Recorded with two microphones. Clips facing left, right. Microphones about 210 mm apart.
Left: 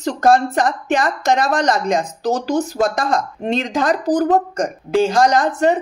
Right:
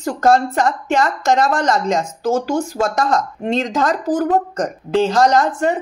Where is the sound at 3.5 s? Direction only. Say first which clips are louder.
Even; 15° left (ahead or behind).